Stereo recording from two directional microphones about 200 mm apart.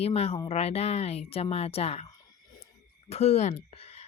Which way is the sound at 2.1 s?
15° left (ahead or behind).